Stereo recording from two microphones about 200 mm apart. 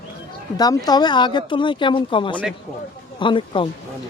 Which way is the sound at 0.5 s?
20° left (ahead or behind).